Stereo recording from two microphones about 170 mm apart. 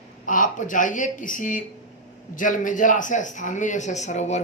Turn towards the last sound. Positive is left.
turn(degrees=40)  # may be behind; listen again after turning